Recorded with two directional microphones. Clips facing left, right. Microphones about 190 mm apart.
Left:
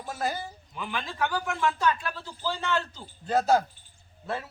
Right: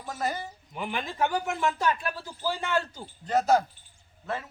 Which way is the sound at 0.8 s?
20° right (ahead or behind).